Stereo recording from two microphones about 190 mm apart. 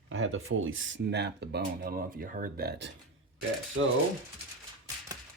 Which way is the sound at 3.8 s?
90° right.